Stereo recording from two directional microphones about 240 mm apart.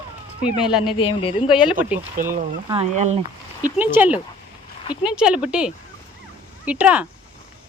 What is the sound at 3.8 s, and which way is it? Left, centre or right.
Speech, centre.